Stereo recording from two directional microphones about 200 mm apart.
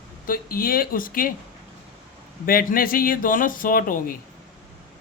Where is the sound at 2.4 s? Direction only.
45° left (ahead or behind).